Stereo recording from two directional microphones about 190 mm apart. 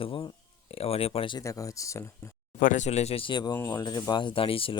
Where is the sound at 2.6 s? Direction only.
40° left (ahead or behind).